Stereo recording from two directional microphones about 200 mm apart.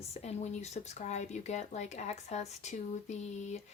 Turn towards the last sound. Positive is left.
turn(degrees=35)  # may be behind; listen again after turning